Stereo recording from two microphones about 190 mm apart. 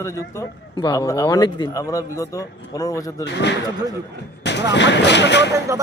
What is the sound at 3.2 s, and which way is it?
Speech, 65° left (ahead or behind).